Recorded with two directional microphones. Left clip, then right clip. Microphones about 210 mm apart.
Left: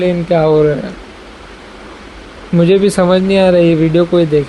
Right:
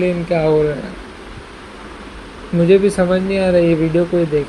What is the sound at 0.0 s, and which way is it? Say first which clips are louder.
Speech: left 4 dB; 35° left (ahead or behind).